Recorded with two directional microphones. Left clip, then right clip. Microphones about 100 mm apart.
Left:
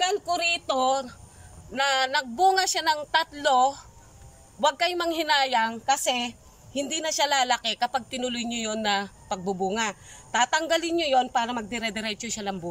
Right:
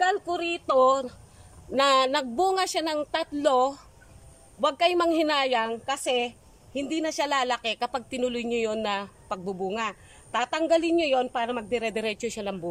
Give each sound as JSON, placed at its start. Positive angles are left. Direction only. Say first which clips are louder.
{"t": 0.3, "sound": "speech", "louder": "left 2 dB", "side_deg": 0}
{"t": 0.8, "sound": "a woman's voice", "louder": "right 2 dB", "side_deg": -30}